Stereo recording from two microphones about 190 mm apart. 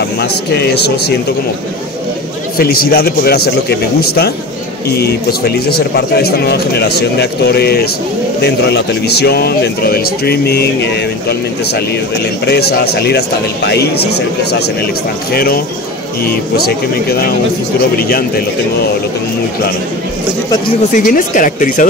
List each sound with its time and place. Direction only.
0.2 s speech: 60° left (ahead or behind)
2.5 s speech: 50° left (ahead or behind)
20.9 s speech: 45° left (ahead or behind)